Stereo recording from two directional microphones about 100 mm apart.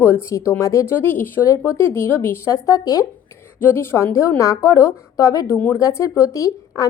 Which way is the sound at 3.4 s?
20° left (ahead or behind).